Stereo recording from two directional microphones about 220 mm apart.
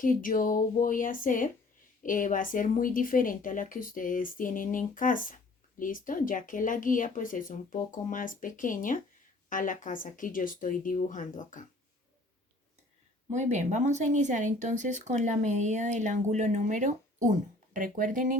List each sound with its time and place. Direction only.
0.0 s a woman's voice: 40° left (ahead or behind)
13.3 s speech: 30° right (ahead or behind)